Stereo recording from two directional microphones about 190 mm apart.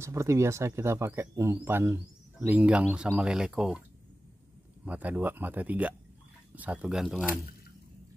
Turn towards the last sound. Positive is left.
turn(degrees=0)  # may be behind; listen again after turning